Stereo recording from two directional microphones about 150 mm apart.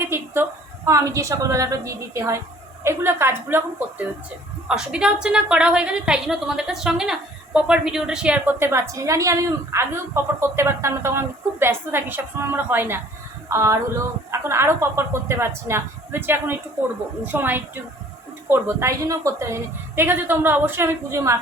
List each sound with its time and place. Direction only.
0.0 s a woman's voice: 15° right (ahead or behind)
4.7 s a woman's voice: 5° right (ahead or behind)